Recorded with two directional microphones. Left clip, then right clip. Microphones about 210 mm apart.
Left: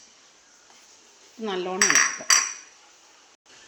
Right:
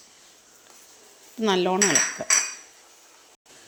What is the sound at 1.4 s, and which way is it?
Speech, 30° right (ahead or behind).